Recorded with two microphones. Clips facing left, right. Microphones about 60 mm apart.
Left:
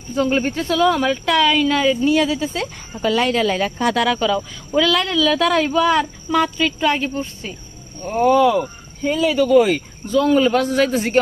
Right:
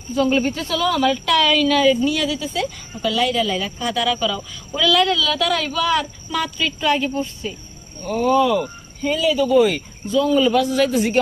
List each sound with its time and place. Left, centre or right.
0.1 s speech: left
9.4 s speech: left